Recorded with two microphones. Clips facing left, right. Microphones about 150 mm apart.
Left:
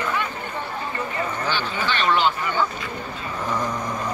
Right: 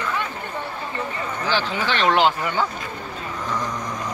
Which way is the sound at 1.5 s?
90° right.